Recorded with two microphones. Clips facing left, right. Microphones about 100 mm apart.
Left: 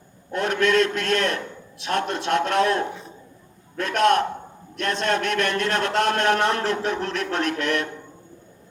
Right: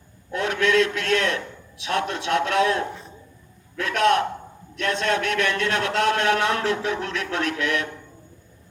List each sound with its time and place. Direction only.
0.3 s a man's voice: 40° left (ahead or behind)